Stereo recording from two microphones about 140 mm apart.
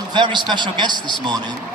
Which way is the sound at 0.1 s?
30° right (ahead or behind).